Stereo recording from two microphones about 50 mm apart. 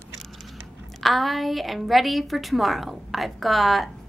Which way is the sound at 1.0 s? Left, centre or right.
Centre.